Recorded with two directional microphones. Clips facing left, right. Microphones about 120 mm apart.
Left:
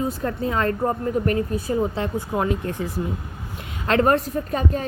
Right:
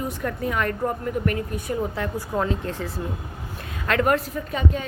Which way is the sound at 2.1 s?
15° left (ahead or behind).